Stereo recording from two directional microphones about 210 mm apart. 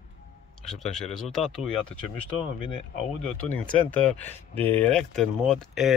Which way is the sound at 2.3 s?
25° left (ahead or behind).